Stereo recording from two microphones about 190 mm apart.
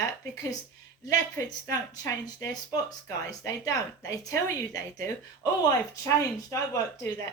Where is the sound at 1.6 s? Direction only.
15° left (ahead or behind).